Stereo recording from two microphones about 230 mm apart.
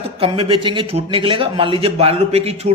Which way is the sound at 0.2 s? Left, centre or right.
Right.